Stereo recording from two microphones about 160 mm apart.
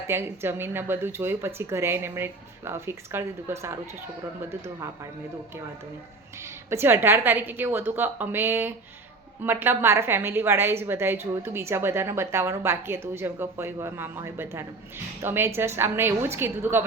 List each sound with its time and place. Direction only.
0.1 s a woman's voice: 15° right (ahead or behind)
6.4 s a woman's voice: 15° right (ahead or behind)